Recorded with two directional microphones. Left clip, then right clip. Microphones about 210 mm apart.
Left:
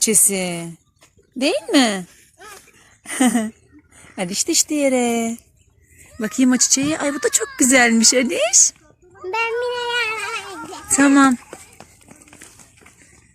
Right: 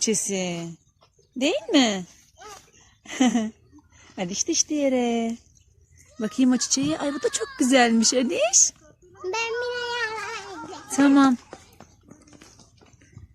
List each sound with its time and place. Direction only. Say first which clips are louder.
0.0 s speech: left 6 dB; 5° left (ahead or behind)
4.7 s speech: left 5 dB; 5° left (ahead or behind)
9.3 s speech: left 6 dB; 25° right (ahead or behind)
10.2 s a sound: left 6 dB; 15° left (ahead or behind)
10.9 s speech: left 5 dB; centre (ahead or behind)
11.5 s a sound: left 5 dB; 40° left (ahead or behind)